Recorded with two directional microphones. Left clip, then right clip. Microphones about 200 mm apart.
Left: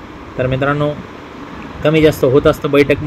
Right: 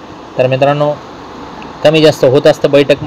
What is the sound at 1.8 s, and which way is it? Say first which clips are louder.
Speech: right 4 dB; 25° right (ahead or behind).